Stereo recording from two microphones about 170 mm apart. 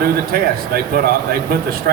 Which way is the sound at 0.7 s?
65° right (ahead or behind).